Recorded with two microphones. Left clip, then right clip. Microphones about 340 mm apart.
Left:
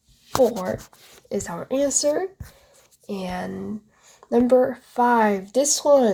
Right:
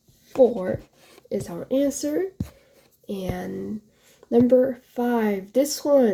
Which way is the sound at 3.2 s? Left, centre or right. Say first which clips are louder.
Left 2 dB; left.